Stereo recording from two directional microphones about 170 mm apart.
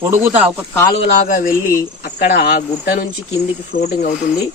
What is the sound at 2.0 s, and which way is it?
Speech, 60° left (ahead or behind).